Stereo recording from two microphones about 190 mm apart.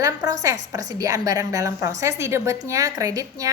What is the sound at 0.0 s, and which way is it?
A woman's voice, 20° right (ahead or behind).